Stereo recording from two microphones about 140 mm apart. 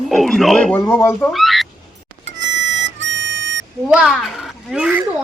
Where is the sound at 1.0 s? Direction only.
15° left (ahead or behind).